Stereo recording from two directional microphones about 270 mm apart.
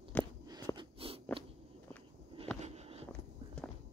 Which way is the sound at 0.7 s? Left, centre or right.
Right.